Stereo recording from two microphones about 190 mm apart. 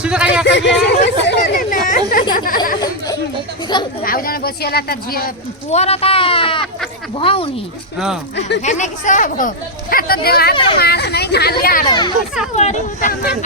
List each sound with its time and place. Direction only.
0.0 s a sound: 5° right (ahead or behind)
0.4 s speech: 65° left (ahead or behind)
0.9 s chatter: 55° left (ahead or behind)
4.0 s speech: 50° left (ahead or behind)
5.7 s speech: 35° left (ahead or behind)
7.9 s speech: centre (ahead or behind)
8.4 s speech: 65° left (ahead or behind)
8.6 s speech: 40° left (ahead or behind)
11.9 s speech: 25° left (ahead or behind)
12.5 s speech: 40° left (ahead or behind)